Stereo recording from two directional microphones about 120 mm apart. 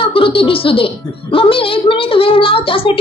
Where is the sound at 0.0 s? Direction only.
50° left (ahead or behind).